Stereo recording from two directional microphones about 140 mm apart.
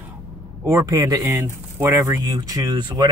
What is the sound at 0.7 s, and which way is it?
Speech, 20° right (ahead or behind).